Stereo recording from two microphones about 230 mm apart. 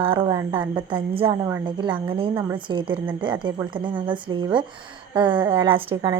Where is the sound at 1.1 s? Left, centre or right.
Right.